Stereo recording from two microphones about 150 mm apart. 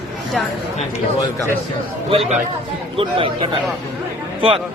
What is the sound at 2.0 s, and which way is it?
A woman's voice, 40° right (ahead or behind).